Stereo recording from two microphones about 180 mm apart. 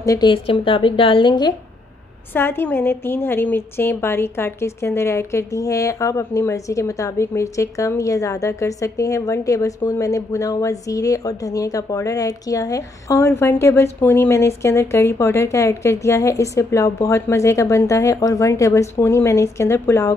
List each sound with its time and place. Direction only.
0.0 s a woman's voice: 20° left (ahead or behind)
2.3 s a woman's voice: 10° left (ahead or behind)